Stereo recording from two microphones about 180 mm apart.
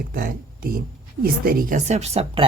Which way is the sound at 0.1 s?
55° right (ahead or behind).